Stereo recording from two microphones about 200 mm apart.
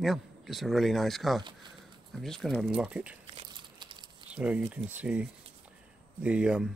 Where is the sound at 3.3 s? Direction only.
25° right (ahead or behind).